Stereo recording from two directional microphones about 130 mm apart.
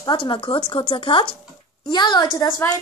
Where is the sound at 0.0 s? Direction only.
40° left (ahead or behind).